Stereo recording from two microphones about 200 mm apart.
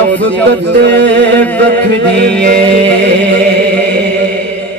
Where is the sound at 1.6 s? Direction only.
60° right (ahead or behind).